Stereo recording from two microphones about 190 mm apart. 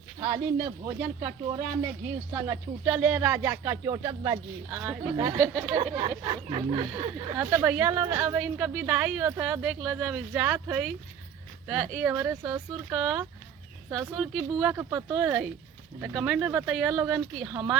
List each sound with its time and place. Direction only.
0.2 s speech: 25° right (ahead or behind)
1.2 s speech: 15° right (ahead or behind)
4.7 s a woman's voice: 5° right (ahead or behind)
5.1 s speech: 20° right (ahead or behind)
7.3 s a woman's voice: 10° right (ahead or behind)
11.9 s speech: 10° right (ahead or behind)
12.9 s a woman's voice: 5° right (ahead or behind)
14.8 s a woman's voice: 15° right (ahead or behind)